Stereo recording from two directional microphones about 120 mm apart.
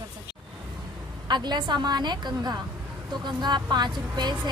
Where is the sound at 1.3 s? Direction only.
40° right (ahead or behind).